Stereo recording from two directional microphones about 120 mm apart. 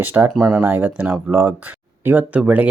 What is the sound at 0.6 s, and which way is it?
Speech, 15° right (ahead or behind).